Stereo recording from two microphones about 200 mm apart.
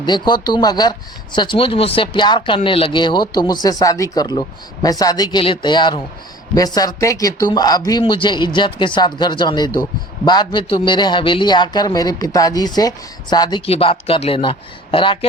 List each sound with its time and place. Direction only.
0.0 s speech: 20° left (ahead or behind)